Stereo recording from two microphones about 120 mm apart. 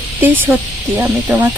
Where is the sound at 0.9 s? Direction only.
15° right (ahead or behind).